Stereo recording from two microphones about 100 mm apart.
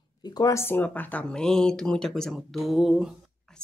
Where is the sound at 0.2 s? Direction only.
40° left (ahead or behind).